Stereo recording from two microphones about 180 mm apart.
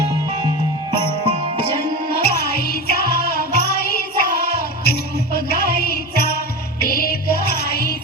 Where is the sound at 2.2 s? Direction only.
60° left (ahead or behind).